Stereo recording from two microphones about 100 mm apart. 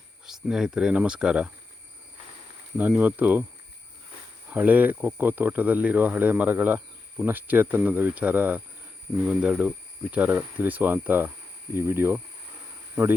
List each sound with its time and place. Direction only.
0.3 s speech: 5° right (ahead or behind)
2.7 s speech: 20° right (ahead or behind)
4.4 s speech: 15° right (ahead or behind)